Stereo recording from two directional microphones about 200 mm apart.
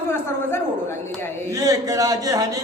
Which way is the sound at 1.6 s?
20° right (ahead or behind).